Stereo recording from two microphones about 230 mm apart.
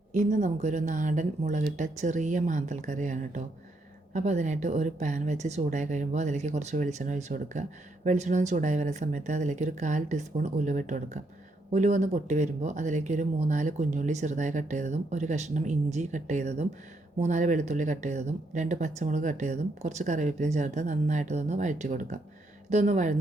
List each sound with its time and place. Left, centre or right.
0.1 s speech: right